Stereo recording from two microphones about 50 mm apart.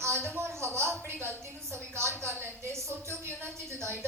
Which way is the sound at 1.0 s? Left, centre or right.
Right.